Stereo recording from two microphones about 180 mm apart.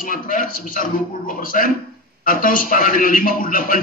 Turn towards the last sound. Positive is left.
turn(degrees=50)  # may be behind; listen again after turning